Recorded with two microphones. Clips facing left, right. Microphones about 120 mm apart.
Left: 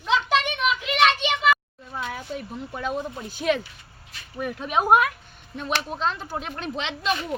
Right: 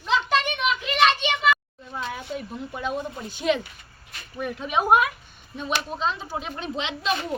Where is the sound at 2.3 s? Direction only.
Centre (ahead or behind).